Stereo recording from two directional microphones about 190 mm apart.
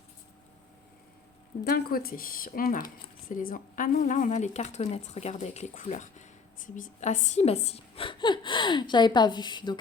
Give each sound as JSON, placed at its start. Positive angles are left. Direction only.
{"t": 1.6, "sound": "speech", "side_deg": 50}